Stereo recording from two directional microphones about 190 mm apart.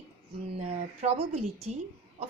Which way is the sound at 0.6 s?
35° right (ahead or behind).